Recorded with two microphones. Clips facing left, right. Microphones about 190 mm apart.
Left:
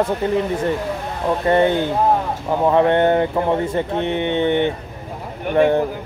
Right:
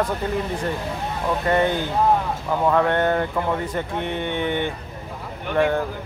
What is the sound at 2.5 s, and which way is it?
Speech, 20° left (ahead or behind).